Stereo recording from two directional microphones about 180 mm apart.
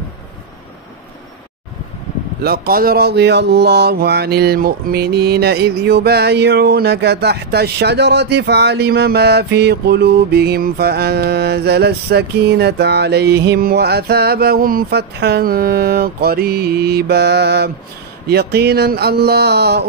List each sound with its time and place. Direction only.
2.4 s speech: 55° right (ahead or behind)